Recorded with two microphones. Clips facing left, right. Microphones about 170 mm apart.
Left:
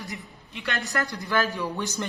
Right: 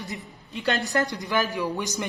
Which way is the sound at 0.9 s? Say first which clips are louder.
Right 2 dB; 20° right (ahead or behind).